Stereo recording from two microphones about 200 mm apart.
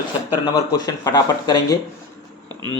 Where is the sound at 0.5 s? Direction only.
20° left (ahead or behind).